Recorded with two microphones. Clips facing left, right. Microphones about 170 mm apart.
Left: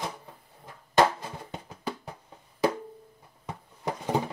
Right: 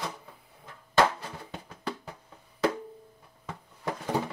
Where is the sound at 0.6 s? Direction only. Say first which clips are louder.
Left 2 dB; 15° left (ahead or behind).